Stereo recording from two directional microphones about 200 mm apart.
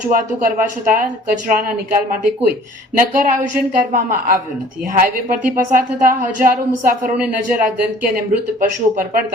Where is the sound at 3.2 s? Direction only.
40° right (ahead or behind).